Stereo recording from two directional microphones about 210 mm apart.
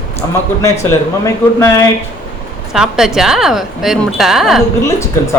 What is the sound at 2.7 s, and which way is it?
A woman's voice, centre (ahead or behind).